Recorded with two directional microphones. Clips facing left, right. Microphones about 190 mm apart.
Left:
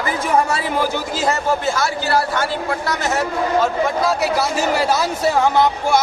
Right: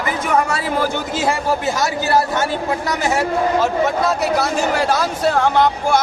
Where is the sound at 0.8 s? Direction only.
5° right (ahead or behind).